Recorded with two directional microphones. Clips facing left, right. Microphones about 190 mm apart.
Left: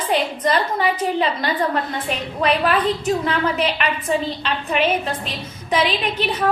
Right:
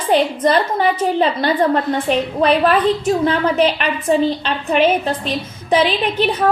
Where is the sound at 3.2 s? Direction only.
30° right (ahead or behind).